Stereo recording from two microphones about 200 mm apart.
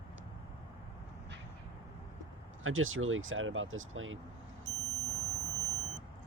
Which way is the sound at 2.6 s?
85° right.